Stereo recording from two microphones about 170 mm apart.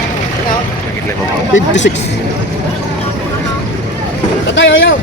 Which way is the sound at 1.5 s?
90° left.